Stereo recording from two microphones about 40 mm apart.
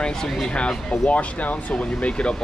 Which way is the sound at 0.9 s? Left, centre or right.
Left.